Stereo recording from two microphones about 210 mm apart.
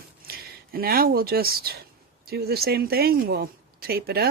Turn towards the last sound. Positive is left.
turn(degrees=-50)  # may be behind; listen again after turning